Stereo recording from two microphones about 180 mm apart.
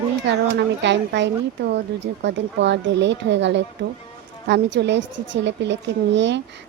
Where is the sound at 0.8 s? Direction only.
75° right (ahead or behind).